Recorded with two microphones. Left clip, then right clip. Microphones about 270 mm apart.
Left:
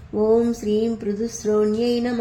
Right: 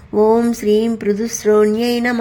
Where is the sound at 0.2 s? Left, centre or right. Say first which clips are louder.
Right 5 dB; right.